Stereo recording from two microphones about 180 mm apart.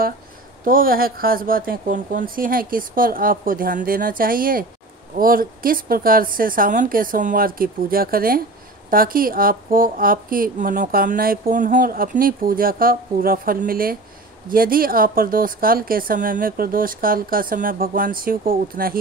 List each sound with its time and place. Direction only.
0.7 s a woman's voice: 50° right (ahead or behind)